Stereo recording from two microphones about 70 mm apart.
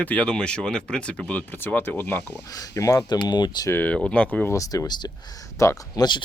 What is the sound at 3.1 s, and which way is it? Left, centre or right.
Speech, left.